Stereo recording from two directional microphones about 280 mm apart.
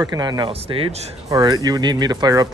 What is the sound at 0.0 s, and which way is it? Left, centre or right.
Speech, centre.